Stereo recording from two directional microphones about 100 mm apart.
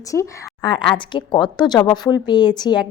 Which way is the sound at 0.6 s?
55° left (ahead or behind).